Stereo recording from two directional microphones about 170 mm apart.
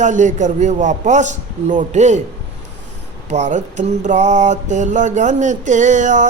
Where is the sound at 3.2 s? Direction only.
45° right (ahead or behind).